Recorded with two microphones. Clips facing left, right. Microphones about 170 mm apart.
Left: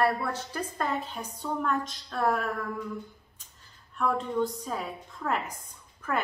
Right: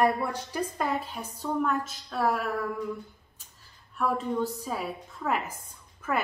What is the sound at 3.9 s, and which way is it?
A woman's voice, 5° right (ahead or behind).